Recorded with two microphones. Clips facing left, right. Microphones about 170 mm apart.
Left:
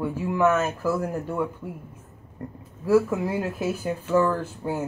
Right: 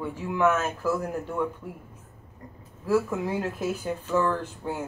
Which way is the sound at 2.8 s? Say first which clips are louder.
Left 4 dB; 10° left (ahead or behind).